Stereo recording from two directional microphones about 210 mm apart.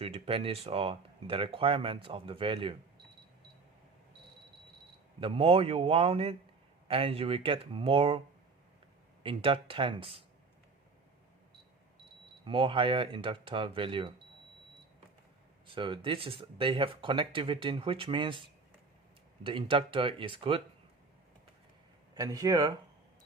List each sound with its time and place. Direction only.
0.0 s speech: 25° right (ahead or behind)
5.2 s speech: 25° right (ahead or behind)
9.2 s speech: 25° right (ahead or behind)
12.5 s speech: 25° right (ahead or behind)
15.6 s speech: 25° right (ahead or behind)
22.1 s speech: 15° right (ahead or behind)